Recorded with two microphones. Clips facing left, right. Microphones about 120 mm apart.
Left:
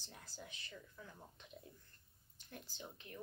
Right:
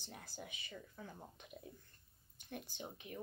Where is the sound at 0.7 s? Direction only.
55° right (ahead or behind).